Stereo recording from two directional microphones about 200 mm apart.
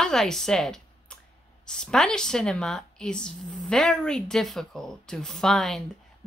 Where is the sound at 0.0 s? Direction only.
5° left (ahead or behind).